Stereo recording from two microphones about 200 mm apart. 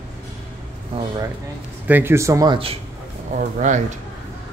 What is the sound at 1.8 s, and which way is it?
Speech, 10° right (ahead or behind).